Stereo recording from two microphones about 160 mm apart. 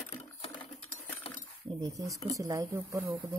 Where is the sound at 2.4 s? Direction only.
20° right (ahead or behind).